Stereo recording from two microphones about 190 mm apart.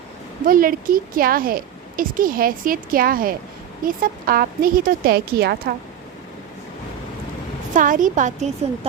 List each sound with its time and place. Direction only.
0.4 s a woman's voice: 45° right (ahead or behind)
7.7 s a woman's voice: 45° right (ahead or behind)